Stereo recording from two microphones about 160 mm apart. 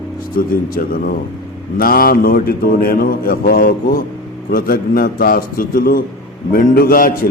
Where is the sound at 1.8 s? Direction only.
65° left (ahead or behind).